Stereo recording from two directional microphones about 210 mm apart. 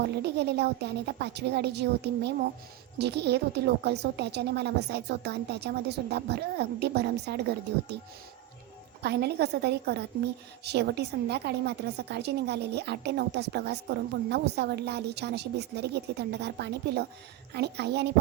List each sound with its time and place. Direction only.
0.2 s a woman's voice: 55° right (ahead or behind)
9.0 s a woman's voice: 50° right (ahead or behind)